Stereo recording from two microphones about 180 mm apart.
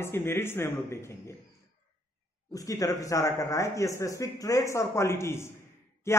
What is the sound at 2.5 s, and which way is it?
Speech, 20° left (ahead or behind).